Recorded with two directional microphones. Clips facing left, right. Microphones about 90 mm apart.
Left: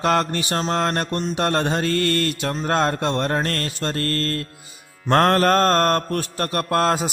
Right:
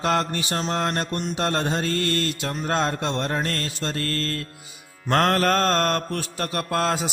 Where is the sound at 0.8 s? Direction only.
70° left (ahead or behind).